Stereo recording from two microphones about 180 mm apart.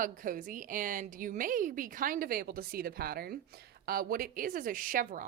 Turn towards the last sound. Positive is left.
turn(degrees=-50)  # may be behind; listen again after turning